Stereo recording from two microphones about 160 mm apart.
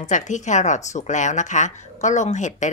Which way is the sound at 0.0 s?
50° left (ahead or behind).